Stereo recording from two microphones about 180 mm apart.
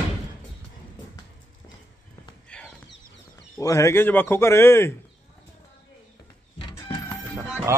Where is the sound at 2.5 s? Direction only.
5° left (ahead or behind).